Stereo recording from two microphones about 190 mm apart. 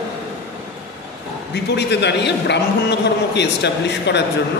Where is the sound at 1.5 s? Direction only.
65° left (ahead or behind).